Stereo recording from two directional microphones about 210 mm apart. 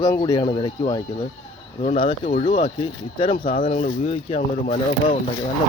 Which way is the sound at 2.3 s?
35° left (ahead or behind).